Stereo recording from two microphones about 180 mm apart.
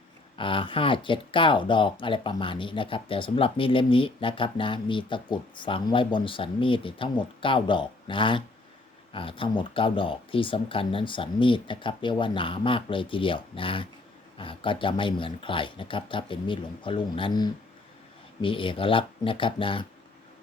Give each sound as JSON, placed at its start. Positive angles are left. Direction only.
{"t": 0.3, "sound": "speech", "side_deg": 30}